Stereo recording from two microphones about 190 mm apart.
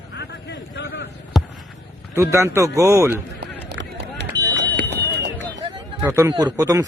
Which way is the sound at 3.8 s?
65° right (ahead or behind).